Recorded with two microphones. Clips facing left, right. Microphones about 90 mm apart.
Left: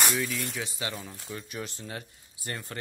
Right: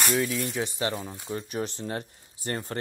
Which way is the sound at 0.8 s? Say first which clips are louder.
Right 6 dB; 35° right (ahead or behind).